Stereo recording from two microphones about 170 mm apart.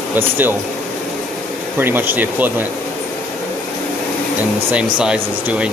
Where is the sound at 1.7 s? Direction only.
10° right (ahead or behind).